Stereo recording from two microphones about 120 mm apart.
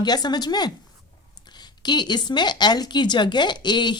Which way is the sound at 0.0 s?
35° left (ahead or behind).